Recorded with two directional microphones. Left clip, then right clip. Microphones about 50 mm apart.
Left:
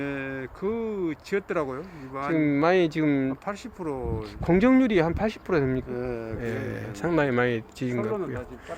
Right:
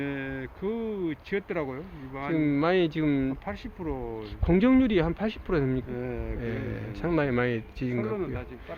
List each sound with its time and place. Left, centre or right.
0.0 s vehicle: centre
0.6 s speech: centre
2.2 s speech: left
3.1 s speech: centre
3.4 s speech: centre
4.4 s speech: left
5.9 s speech: centre
6.4 s speech: left
7.9 s speech: centre